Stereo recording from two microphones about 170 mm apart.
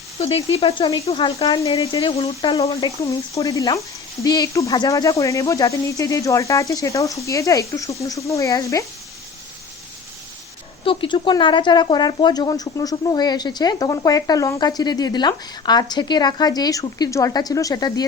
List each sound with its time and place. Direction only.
0.2 s speech: 35° left (ahead or behind)
2.6 s speech: 20° left (ahead or behind)
10.8 s speech: 30° left (ahead or behind)